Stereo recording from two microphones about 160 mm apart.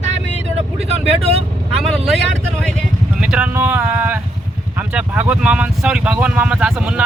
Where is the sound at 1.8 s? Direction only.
Centre (ahead or behind).